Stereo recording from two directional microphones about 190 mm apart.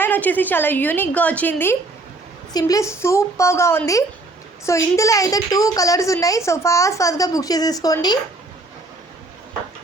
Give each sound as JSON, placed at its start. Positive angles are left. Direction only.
{"t": 0.0, "sound": "a woman's voice", "side_deg": 10}